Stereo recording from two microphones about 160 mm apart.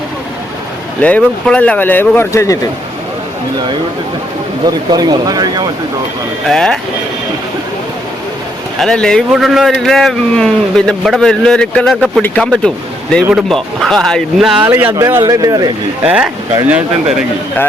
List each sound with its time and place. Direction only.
1.0 s speech: 10° left (ahead or behind)
4.6 s speech: 25° right (ahead or behind)
6.5 s a man's voice: 5° left (ahead or behind)
8.8 s a man's voice: 5° left (ahead or behind)
14.6 s speech: 15° right (ahead or behind)
16.0 s speech: 5° right (ahead or behind)